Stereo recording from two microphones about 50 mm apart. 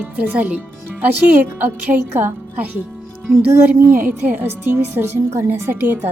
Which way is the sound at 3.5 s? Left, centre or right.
Right.